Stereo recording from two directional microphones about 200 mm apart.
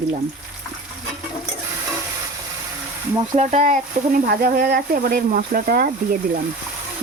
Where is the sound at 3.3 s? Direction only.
35° right (ahead or behind).